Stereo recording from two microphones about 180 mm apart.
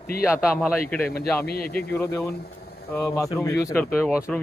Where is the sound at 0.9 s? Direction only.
10° left (ahead or behind).